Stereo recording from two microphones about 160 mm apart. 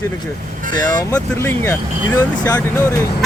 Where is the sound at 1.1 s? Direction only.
15° left (ahead or behind).